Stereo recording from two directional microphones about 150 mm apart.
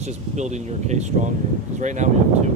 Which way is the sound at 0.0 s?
50° right (ahead or behind).